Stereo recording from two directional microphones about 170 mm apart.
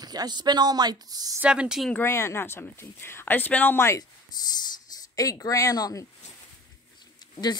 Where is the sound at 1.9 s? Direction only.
15° left (ahead or behind).